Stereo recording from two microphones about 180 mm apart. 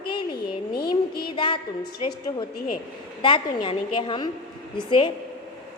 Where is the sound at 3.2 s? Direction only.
25° left (ahead or behind).